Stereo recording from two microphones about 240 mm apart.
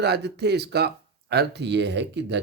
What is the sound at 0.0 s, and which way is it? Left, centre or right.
Speech, right.